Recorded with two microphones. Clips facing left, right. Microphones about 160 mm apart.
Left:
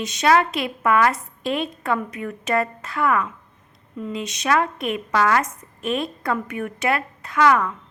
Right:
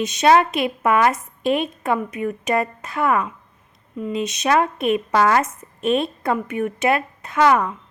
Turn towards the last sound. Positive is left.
turn(degrees=-20)  # may be behind; listen again after turning